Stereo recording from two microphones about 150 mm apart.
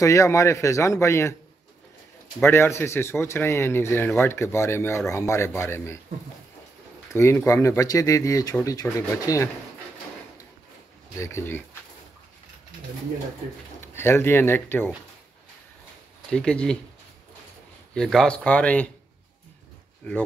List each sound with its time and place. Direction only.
0.0 s speech: 20° left (ahead or behind)
2.4 s speech: 15° left (ahead or behind)
7.2 s speech: 20° left (ahead or behind)
11.1 s speech: 20° left (ahead or behind)
13.7 s speech: 15° left (ahead or behind)
16.3 s speech: 5° left (ahead or behind)
17.9 s speech: 5° left (ahead or behind)